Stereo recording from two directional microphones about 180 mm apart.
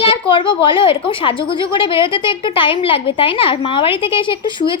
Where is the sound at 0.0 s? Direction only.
30° left (ahead or behind).